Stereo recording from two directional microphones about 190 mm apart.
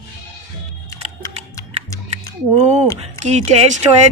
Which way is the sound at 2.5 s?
35° right (ahead or behind).